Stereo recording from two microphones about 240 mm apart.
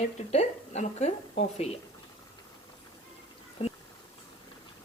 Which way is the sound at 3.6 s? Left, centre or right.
Left.